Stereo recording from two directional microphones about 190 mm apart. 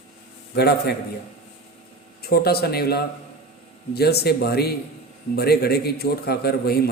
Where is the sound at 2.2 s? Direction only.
55° left (ahead or behind).